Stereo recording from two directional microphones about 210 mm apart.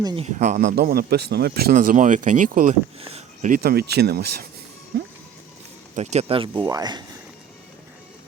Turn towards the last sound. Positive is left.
turn(degrees=-20)  # may be behind; listen again after turning